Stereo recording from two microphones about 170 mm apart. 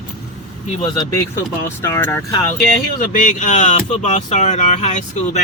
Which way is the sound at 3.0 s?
50° left (ahead or behind).